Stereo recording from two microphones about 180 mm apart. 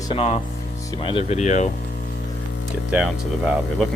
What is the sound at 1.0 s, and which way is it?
Speech, 35° left (ahead or behind).